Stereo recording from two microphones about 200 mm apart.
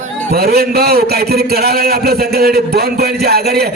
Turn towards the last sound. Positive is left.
turn(degrees=-50)  # may be behind; listen again after turning